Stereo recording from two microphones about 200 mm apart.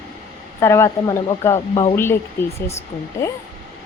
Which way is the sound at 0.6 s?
15° left (ahead or behind).